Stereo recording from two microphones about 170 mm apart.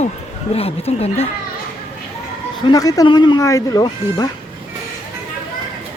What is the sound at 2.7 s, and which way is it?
A woman's voice, 20° left (ahead or behind).